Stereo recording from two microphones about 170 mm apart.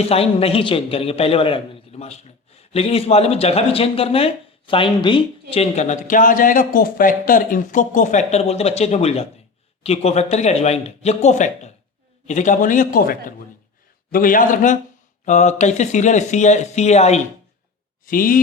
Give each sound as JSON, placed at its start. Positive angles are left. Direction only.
{"t": 0.1, "sound": "a man's voice", "side_deg": 35}
{"t": 18.0, "sound": "speech", "side_deg": 55}